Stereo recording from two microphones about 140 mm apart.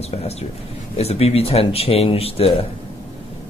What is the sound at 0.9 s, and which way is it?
A man's voice, 45° left (ahead or behind).